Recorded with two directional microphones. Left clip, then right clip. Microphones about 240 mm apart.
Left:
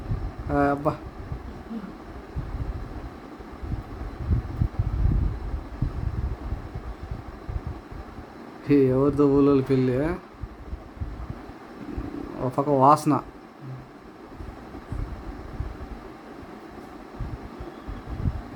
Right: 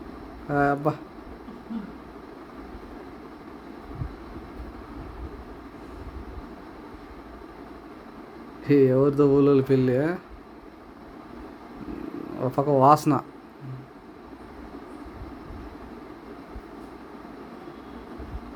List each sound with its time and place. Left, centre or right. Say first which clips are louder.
0.5 s speech: even; centre
8.6 s speech: right 1 dB; centre
12.4 s speech: even; centre